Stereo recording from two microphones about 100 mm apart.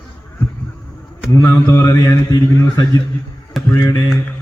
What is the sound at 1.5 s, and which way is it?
Mantra, 30° left (ahead or behind).